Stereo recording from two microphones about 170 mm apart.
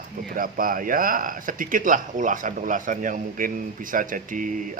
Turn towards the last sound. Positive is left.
turn(degrees=-50)  # may be behind; listen again after turning